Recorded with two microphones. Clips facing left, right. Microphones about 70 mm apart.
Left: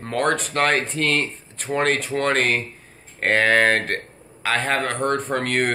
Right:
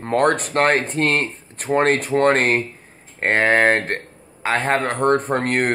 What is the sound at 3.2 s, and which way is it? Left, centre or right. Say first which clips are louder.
Speech: right 1 dB; right.